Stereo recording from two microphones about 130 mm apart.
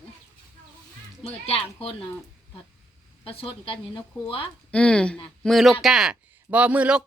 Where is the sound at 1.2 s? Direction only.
50° left (ahead or behind).